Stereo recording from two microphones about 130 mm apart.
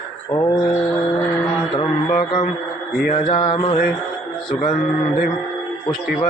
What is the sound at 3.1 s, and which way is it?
Speech, 40° left (ahead or behind).